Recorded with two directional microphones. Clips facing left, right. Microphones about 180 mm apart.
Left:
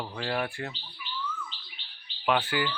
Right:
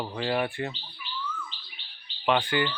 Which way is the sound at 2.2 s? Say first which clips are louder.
Right 2 dB; 5° left (ahead or behind).